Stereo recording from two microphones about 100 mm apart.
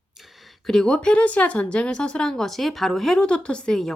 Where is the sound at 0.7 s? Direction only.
5° left (ahead or behind).